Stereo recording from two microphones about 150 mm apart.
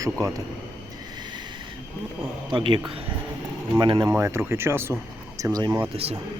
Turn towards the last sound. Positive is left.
turn(degrees=-40)  # may be behind; listen again after turning